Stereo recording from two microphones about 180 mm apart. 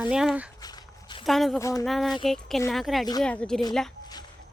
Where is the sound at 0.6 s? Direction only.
25° left (ahead or behind).